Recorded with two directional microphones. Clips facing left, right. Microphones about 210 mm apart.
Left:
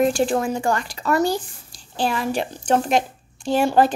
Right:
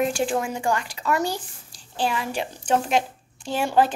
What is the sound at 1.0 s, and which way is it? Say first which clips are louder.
A woman's voice: left 6 dB; 40° left (ahead or behind).